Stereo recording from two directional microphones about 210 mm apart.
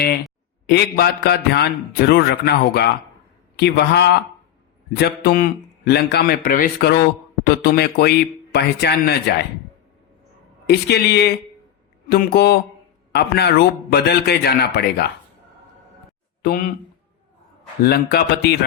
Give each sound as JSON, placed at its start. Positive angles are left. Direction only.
{"t": 0.7, "sound": "a man's voice", "side_deg": 50}
{"t": 10.7, "sound": "a man's voice", "side_deg": 50}
{"t": 16.4, "sound": "speech", "side_deg": 40}
{"t": 17.8, "sound": "a man's voice", "side_deg": 50}